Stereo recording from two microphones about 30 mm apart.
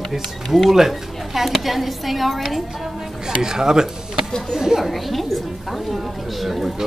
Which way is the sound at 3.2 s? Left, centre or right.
Centre.